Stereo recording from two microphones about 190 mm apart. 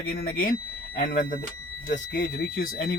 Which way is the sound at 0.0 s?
50° left (ahead or behind).